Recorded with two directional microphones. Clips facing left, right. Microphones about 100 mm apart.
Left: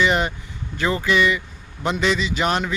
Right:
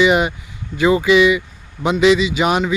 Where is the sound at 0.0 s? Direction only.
10° right (ahead or behind).